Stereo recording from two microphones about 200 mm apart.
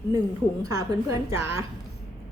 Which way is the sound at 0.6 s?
20° right (ahead or behind).